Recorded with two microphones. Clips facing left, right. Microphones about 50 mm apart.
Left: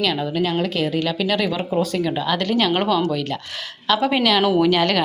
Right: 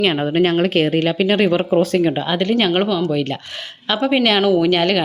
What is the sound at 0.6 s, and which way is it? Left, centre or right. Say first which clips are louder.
Speech: right 5 dB; right.